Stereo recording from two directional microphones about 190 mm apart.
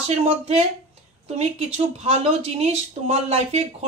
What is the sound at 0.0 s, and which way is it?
A woman's voice, 35° right (ahead or behind).